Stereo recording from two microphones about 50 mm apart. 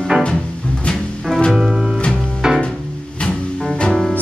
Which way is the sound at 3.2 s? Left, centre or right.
Centre.